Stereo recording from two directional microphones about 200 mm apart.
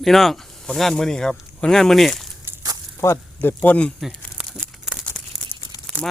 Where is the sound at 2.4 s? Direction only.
15° right (ahead or behind).